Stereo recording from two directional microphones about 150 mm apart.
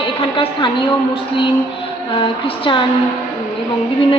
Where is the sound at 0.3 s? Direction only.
35° left (ahead or behind).